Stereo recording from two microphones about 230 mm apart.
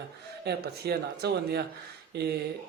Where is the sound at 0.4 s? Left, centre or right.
Right.